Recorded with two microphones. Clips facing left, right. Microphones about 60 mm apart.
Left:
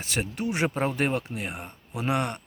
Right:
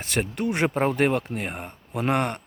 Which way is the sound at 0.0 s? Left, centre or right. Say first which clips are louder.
Right 4 dB; right.